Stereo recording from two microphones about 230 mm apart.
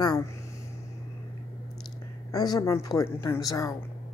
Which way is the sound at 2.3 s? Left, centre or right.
Centre.